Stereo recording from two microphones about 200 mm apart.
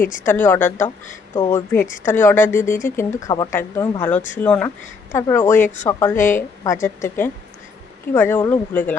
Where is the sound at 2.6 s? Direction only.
40° left (ahead or behind).